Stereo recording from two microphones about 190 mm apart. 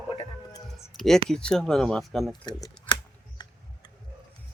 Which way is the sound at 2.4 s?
20° left (ahead or behind).